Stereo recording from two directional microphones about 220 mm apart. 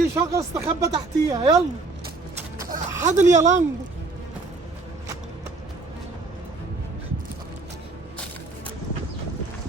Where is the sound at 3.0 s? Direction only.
35° right (ahead or behind).